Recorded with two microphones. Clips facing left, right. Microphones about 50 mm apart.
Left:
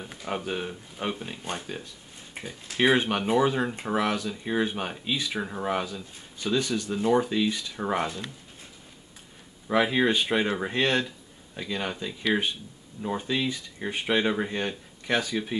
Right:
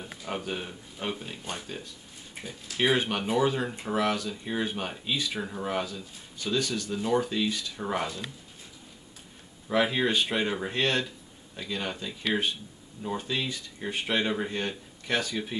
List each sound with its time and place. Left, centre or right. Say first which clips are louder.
0.3 s speech: left 3 dB; centre
2.4 s speech: left 3 dB; centre
5.1 s speech: left 1 dB; centre
9.7 s speech: left 3 dB; centre